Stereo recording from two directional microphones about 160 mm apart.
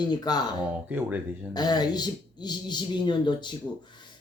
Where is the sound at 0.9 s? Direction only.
10° right (ahead or behind).